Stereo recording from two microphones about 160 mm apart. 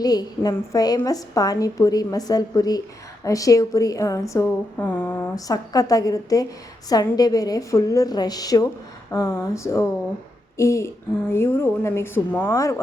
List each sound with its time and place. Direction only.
0.0 s a woman's voice: 25° left (ahead or behind)
5.3 s a woman's voice: 20° left (ahead or behind)